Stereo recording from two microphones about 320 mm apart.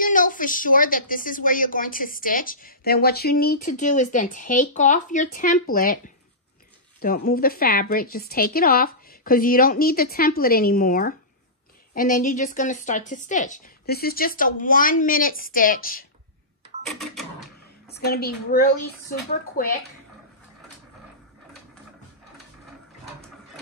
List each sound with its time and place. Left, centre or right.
0.0 s a woman's voice: left
16.8 s cash register: centre
17.8 s a woman's voice: left